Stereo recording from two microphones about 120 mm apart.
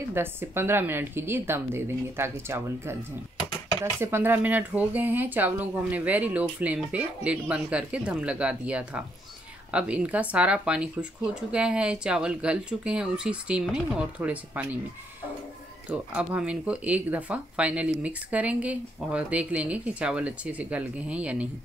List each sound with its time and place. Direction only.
0.1 s a woman's voice: 20° right (ahead or behind)
4.0 s speech: 20° right (ahead or behind)
15.9 s speech: 10° right (ahead or behind)